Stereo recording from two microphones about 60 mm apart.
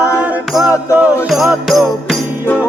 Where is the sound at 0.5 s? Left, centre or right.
Centre.